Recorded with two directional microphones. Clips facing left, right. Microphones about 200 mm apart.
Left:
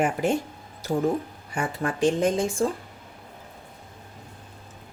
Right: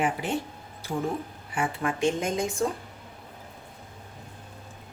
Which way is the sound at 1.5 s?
40° left (ahead or behind).